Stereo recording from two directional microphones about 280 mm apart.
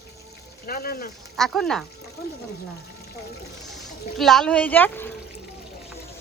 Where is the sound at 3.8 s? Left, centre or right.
Centre.